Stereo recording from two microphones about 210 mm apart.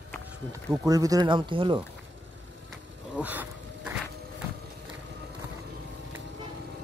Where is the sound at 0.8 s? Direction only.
15° right (ahead or behind).